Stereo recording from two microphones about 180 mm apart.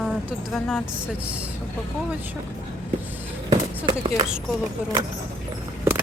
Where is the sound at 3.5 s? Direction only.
25° right (ahead or behind).